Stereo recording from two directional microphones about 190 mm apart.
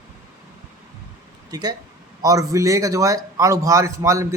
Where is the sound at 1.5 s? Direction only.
20° right (ahead or behind).